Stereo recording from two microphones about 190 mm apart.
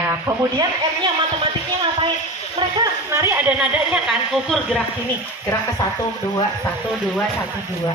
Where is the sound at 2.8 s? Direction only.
15° right (ahead or behind).